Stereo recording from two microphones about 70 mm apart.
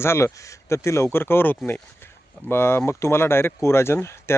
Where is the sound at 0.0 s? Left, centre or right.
Left.